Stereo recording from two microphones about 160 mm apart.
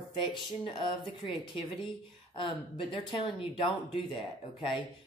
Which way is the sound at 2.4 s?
30° left (ahead or behind).